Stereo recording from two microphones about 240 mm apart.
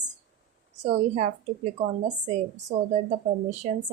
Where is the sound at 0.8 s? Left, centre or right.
Right.